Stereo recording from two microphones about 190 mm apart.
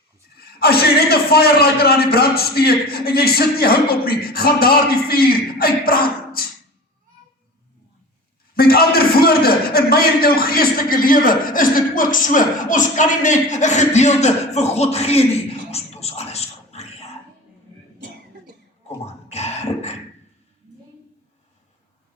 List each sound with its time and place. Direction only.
0.3 s a man's voice: 55° left (ahead or behind)
8.5 s a man's voice: 55° left (ahead or behind); by 15.3 s 35° left (ahead or behind)
15.7 s a sound: 35° left (ahead or behind)
19.0 s beatboxing: 35° left (ahead or behind)